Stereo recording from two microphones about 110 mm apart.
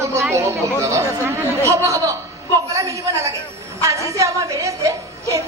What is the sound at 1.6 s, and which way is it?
Speech, 30° right (ahead or behind).